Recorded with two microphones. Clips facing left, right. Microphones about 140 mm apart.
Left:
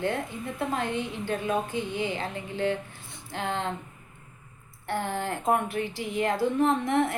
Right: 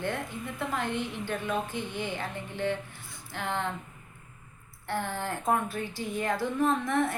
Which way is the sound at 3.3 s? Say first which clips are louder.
Left 2 dB; 20° left (ahead or behind).